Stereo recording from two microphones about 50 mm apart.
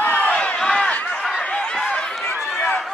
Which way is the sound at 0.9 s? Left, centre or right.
Left.